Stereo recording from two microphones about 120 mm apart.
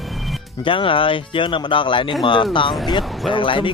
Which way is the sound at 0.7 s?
45° left (ahead or behind).